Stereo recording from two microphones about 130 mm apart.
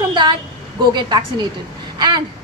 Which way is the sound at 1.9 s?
35° right (ahead or behind).